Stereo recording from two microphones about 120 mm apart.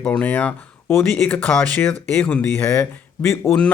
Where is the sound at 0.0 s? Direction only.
10° left (ahead or behind).